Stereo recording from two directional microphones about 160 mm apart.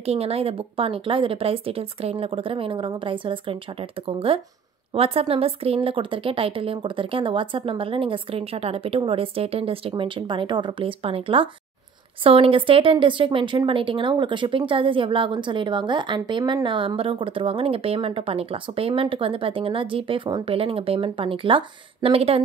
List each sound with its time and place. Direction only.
0.0 s a woman's voice: 40° right (ahead or behind)